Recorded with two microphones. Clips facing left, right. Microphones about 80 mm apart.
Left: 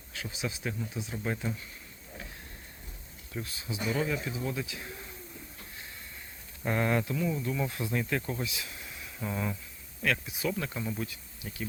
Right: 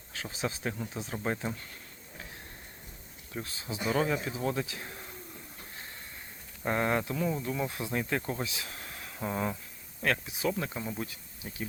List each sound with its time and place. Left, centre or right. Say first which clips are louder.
0.1 s speech: right 2 dB; right
3.3 s speech: even; right
6.7 s speech: even; right
9.1 s a sound: right 2 dB; right
10.0 s speech: right 1 dB; right
10.8 s speech: left 1 dB; centre
11.0 s speech: left 1 dB; right